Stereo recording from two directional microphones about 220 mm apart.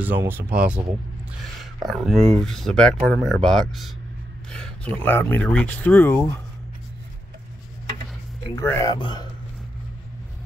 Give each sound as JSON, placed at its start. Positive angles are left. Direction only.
{"t": 0.0, "sound": "speech", "side_deg": -10}
{"t": 1.9, "sound": "speech", "side_deg": 0}
{"t": 8.5, "sound": "speech", "side_deg": 15}